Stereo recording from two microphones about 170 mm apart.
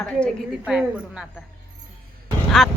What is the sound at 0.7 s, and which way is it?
Speech, 5° right (ahead or behind).